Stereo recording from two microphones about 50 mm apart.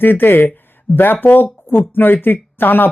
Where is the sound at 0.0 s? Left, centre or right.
Left.